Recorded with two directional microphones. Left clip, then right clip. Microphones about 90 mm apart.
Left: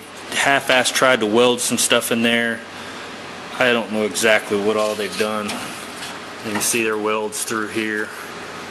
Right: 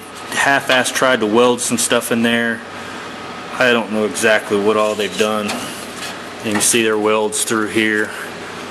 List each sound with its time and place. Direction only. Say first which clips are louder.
0.3 s speech: right 2 dB; 5° left (ahead or behind)
3.6 s speech: right 3 dB; 5° left (ahead or behind)
6.5 s speech: right 5 dB; 20° right (ahead or behind)